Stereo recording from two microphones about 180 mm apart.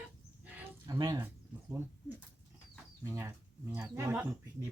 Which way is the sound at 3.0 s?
15° right (ahead or behind).